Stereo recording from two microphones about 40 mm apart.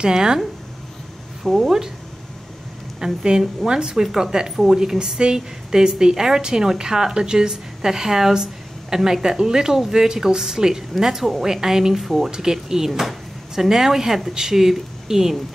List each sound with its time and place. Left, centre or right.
0.0 s a woman's voice: centre
1.4 s speech: centre
3.0 s a woman's voice: centre
12.0 s speech: centre
12.3 s a woman's voice: centre